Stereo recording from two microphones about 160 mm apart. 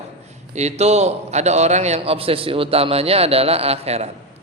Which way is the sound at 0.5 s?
45° right (ahead or behind).